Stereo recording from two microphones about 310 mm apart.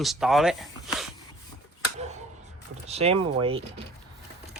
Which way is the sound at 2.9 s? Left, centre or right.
Centre.